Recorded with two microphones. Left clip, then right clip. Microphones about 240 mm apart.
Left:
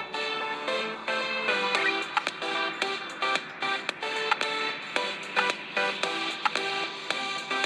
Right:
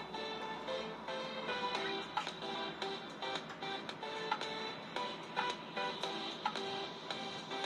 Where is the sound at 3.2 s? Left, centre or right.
Left.